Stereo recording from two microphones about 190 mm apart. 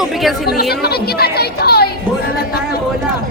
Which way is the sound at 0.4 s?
55° left (ahead or behind).